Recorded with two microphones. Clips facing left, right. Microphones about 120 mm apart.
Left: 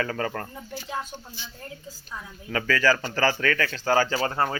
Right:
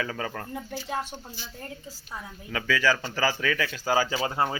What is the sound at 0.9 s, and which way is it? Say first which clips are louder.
Music: right 1 dB; 55° right (ahead or behind).